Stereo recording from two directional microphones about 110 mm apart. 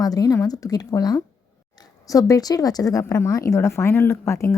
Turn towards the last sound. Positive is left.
turn(degrees=25)  # may be behind; listen again after turning